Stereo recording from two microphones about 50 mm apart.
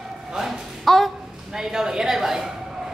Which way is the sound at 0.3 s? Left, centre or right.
Centre.